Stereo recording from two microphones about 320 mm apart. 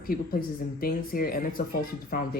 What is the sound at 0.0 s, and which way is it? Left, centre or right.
Speech, left.